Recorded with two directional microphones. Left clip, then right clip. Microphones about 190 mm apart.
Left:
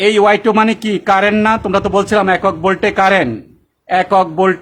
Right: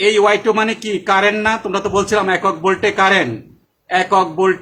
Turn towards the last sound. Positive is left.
turn(degrees=50)  # may be behind; listen again after turning